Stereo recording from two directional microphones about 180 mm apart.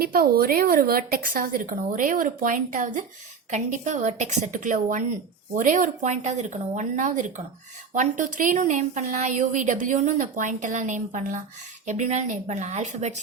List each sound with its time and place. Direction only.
0.0 s a woman's voice: 55° right (ahead or behind)